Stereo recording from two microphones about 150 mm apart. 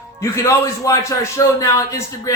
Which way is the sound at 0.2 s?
20° left (ahead or behind).